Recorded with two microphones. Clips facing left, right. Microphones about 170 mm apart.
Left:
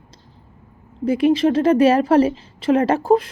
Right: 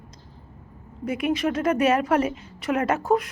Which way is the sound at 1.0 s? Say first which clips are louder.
Left 8 dB; 30° left (ahead or behind).